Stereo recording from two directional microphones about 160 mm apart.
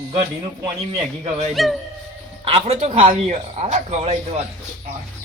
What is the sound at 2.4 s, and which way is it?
Speech, 35° right (ahead or behind).